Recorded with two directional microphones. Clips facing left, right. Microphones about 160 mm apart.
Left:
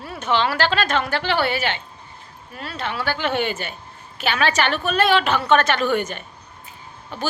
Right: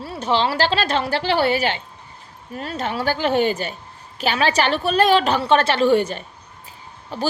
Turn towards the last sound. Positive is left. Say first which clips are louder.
# right 3 dB
turn(degrees=-35)  # may be behind; listen again after turning